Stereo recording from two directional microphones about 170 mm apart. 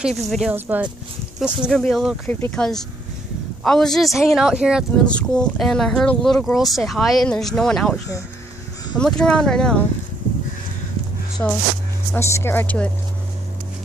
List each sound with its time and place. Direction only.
0.0 s speech: centre (ahead or behind)
0.5 s speech: 10° right (ahead or behind)
5.0 s speech: 5° left (ahead or behind)
11.4 s speech: 15° left (ahead or behind)